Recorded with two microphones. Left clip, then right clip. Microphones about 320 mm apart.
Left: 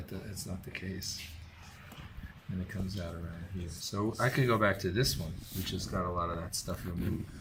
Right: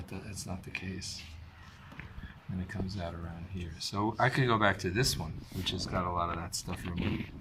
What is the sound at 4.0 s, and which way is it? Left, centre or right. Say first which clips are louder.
Speech: right 2 dB; centre.